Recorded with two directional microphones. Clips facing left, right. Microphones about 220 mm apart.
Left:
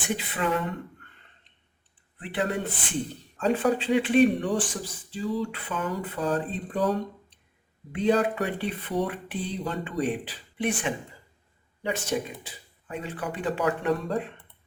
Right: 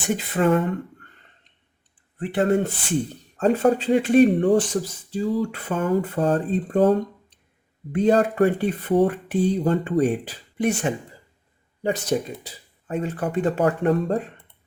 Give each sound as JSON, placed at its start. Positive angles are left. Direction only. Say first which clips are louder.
{"t": 0.1, "sound": "speech", "louder": "right 8 dB", "side_deg": -45}
{"t": 2.1, "sound": "speech", "louder": "right 8 dB", "side_deg": -45}